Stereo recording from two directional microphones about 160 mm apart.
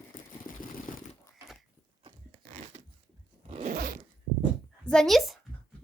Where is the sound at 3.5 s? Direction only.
45° right (ahead or behind).